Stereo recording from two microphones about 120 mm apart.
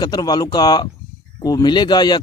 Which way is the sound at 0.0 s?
35° left (ahead or behind).